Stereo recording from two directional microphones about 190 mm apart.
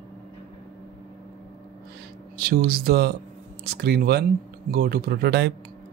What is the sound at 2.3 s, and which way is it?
Speech, 50° right (ahead or behind).